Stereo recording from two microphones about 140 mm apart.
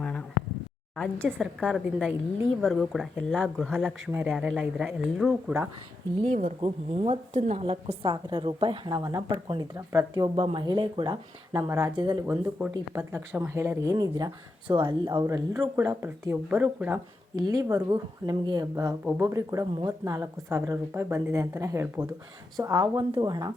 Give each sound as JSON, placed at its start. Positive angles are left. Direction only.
{"t": 0.0, "sound": "a sound", "side_deg": 5}
{"t": 0.9, "sound": "speech", "side_deg": 5}
{"t": 4.1, "sound": "speech", "side_deg": -10}
{"t": 6.2, "sound": "speech", "side_deg": -65}
{"t": 6.6, "sound": "a woman's voice", "side_deg": -45}
{"t": 10.3, "sound": "a woman's voice", "side_deg": -35}
{"t": 12.3, "sound": "speech", "side_deg": -10}
{"t": 12.9, "sound": "speech", "side_deg": -20}
{"t": 17.3, "sound": "speech", "side_deg": -25}